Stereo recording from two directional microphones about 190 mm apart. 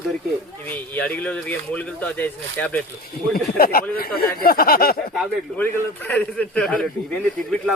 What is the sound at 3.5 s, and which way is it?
Speech, 50° left (ahead or behind).